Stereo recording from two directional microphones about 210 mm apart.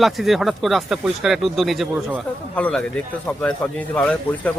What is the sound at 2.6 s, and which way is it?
Speech, 5° left (ahead or behind).